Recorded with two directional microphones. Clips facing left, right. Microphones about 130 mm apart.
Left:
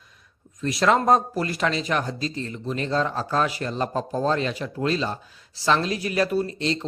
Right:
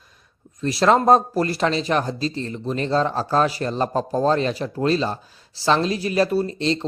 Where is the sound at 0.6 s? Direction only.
35° right (ahead or behind).